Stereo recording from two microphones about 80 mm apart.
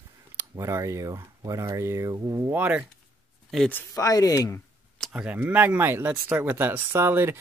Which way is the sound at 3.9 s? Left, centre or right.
Left.